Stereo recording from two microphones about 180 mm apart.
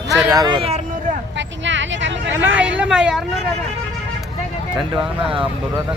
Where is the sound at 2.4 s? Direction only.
10° right (ahead or behind).